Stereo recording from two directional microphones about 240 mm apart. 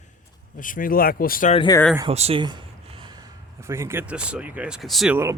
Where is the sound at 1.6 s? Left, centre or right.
Centre.